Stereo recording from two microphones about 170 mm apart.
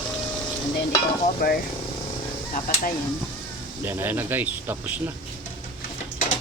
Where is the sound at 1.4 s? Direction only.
55° left (ahead or behind).